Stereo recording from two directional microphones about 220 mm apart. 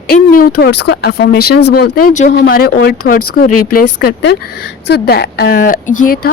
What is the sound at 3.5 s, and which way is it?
Speech, 90° left.